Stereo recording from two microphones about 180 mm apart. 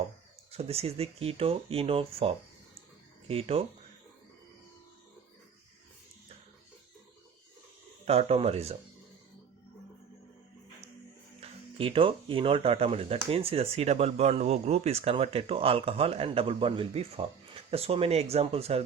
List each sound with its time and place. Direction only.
0.5 s speech: 35° right (ahead or behind)
8.0 s speech: 35° right (ahead or behind)
11.3 s speech: 30° right (ahead or behind)